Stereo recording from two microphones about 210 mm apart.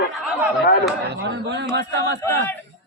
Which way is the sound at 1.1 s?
55° right (ahead or behind).